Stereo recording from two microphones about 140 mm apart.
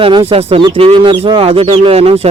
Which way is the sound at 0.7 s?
40° right (ahead or behind).